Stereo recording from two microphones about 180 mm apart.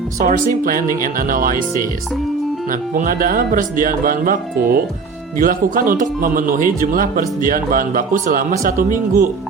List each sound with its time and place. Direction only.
0.3 s speech: 50° right (ahead or behind)
2.6 s speech: 50° right (ahead or behind)